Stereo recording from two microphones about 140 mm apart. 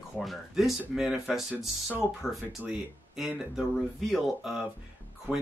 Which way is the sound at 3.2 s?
5° right (ahead or behind).